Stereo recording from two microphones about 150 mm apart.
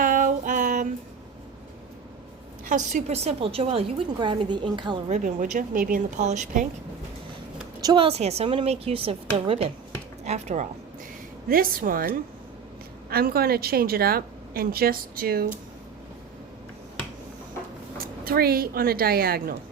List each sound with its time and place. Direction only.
0.0 s music: 60° right (ahead or behind)
2.6 s a woman's voice: 55° right (ahead or behind); by 4.9 s 30° right (ahead or behind)
5.0 s a woman's voice: 55° right (ahead or behind)
7.8 s a sound: 25° right (ahead or behind)
8.0 s a woman's voice: 45° right (ahead or behind)
11.4 s a woman's voice: 75° right (ahead or behind)
13.1 s a woman's voice: 90° right
17.9 s a woman's voice: 85° right